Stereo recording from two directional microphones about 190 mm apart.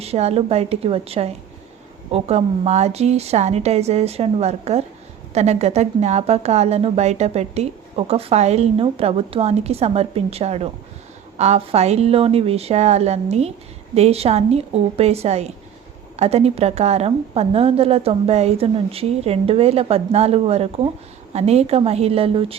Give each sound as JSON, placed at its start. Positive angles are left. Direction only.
{"t": 0.0, "sound": "a woman's voice", "side_deg": -35}